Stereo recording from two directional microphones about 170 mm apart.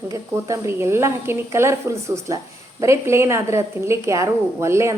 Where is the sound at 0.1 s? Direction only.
20° right (ahead or behind).